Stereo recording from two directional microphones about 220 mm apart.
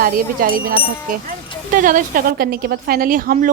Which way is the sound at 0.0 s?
40° right (ahead or behind).